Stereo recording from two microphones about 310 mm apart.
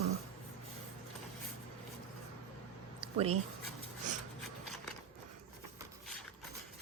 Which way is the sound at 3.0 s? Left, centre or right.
Centre.